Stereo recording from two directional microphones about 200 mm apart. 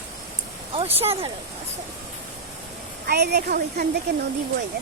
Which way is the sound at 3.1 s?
55° right (ahead or behind).